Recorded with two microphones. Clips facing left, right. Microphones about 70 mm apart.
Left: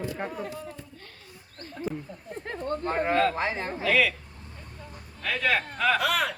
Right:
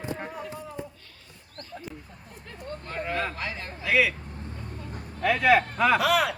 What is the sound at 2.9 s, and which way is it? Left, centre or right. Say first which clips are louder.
Speech: left 6 dB; left.